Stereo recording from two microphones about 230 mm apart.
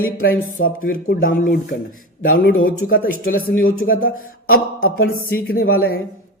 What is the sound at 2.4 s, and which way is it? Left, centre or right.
Speech, left.